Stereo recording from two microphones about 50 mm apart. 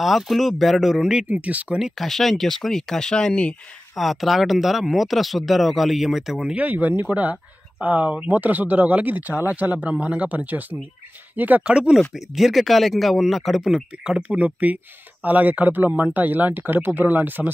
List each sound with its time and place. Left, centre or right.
0.0 s speech: centre
1.3 s speech: right
2.0 s speech: centre
3.9 s speech: centre
6.5 s speech: right
11.6 s speech: centre
12.1 s speech: centre
14.1 s speech: right